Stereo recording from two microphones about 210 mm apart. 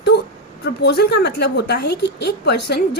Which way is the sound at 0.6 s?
50° left (ahead or behind).